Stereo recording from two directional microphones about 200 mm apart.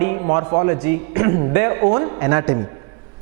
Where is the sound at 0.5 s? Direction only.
15° right (ahead or behind).